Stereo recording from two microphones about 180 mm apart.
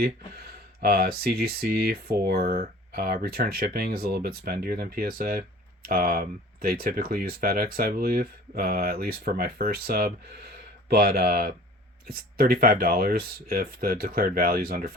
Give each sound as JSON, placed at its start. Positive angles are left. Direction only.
{"t": 0.0, "sound": "speech", "side_deg": -60}